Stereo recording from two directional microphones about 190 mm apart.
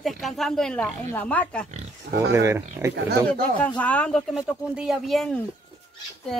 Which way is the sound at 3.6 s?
5° left (ahead or behind).